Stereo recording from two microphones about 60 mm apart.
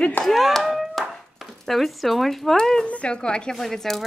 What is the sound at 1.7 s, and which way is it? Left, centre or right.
Speech, centre.